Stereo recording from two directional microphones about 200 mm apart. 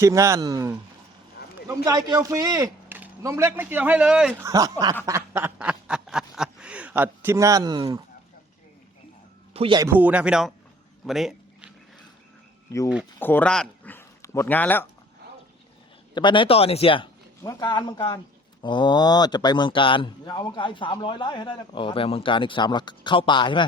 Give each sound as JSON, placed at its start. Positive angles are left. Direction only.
{"t": 0.0, "sound": "speech", "side_deg": -15}
{"t": 4.4, "sound": "speech", "side_deg": -15}
{"t": 5.0, "sound": "snicker", "side_deg": -15}
{"t": 9.5, "sound": "speech", "side_deg": -25}
{"t": 9.9, "sound": "speech", "side_deg": -5}
{"t": 11.0, "sound": "a sound", "side_deg": 0}
{"t": 13.1, "sound": "speech", "side_deg": 10}
{"t": 16.1, "sound": "speech", "side_deg": 25}